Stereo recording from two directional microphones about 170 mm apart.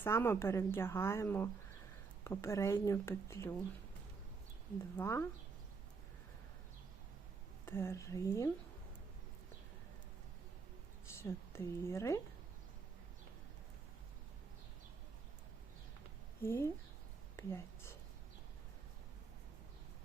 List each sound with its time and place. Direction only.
0.0 s a woman's voice: 15° left (ahead or behind)
4.9 s a woman's voice: 15° left (ahead or behind)
7.6 s a woman's voice: 15° left (ahead or behind)
11.1 s speech: 15° left (ahead or behind)
16.4 s a woman's voice: 15° left (ahead or behind)
17.3 s a sound: 15° left (ahead or behind)